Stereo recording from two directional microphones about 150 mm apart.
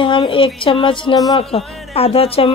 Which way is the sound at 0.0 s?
35° left (ahead or behind).